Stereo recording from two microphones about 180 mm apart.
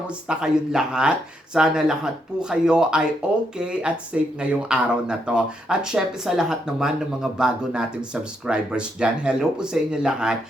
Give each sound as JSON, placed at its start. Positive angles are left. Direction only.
{"t": 0.3, "sound": "speech", "side_deg": -5}